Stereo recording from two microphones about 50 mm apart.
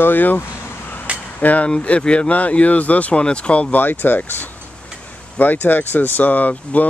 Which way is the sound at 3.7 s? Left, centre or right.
Left.